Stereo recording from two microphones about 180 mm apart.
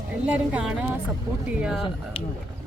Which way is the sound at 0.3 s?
10° right (ahead or behind).